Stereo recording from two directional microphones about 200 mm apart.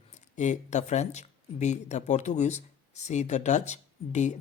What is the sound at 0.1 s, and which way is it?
Speech, 35° left (ahead or behind).